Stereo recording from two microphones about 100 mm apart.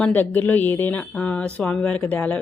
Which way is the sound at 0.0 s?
15° left (ahead or behind).